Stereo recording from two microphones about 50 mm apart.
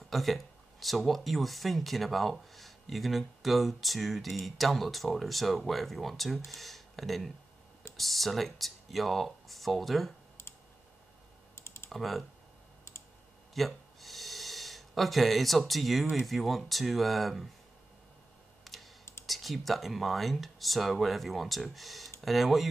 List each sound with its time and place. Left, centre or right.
0.1 s speech: centre
11.5 s typing: left
11.9 s speech: centre
13.6 s speech: centre
18.6 s computer keyboard: centre
19.2 s speech: centre